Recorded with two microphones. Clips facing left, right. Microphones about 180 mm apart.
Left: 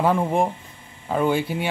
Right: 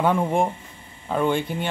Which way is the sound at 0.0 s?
Centre (ahead or behind).